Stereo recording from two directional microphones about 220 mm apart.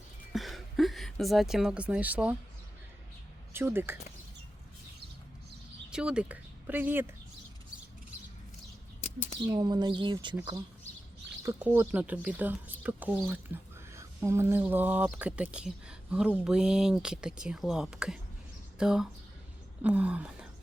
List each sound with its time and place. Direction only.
0.3 s speech: centre (ahead or behind)
3.5 s speech: 10° right (ahead or behind)
5.9 s speech: 5° right (ahead or behind)
9.0 s bird: 30° left (ahead or behind)
9.5 s speech: 20° right (ahead or behind)
11.4 s speech: 10° right (ahead or behind)
19.8 s a sound: 5° right (ahead or behind)